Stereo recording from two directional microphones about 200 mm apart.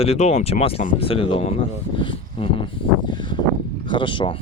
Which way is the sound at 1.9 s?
25° left (ahead or behind).